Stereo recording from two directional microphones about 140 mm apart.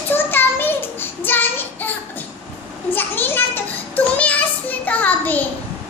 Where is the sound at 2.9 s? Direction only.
15° left (ahead or behind).